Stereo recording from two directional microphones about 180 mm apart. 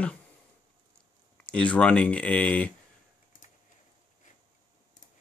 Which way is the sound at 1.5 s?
5° left (ahead or behind).